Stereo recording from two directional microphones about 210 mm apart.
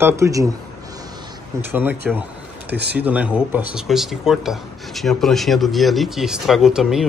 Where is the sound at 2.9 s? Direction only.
5° right (ahead or behind).